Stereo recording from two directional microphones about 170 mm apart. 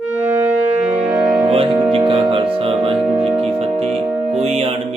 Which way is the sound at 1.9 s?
30° right (ahead or behind).